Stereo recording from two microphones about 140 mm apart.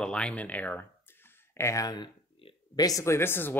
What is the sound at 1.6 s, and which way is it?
Speech, 20° left (ahead or behind).